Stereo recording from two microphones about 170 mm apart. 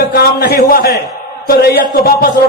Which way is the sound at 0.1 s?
65° left (ahead or behind).